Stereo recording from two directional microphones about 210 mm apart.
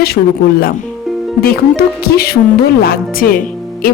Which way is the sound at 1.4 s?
45° left (ahead or behind).